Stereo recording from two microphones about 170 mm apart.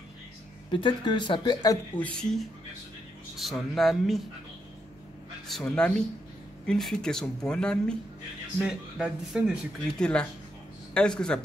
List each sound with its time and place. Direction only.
0.7 s speech: 30° left (ahead or behind)
2.0 s speech: 10° left (ahead or behind)
5.5 s speech: 5° left (ahead or behind)